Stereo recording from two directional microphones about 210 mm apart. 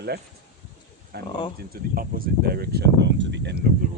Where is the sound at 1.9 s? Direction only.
45° right (ahead or behind).